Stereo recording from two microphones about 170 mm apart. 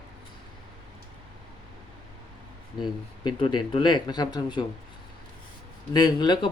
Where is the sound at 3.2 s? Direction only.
35° left (ahead or behind).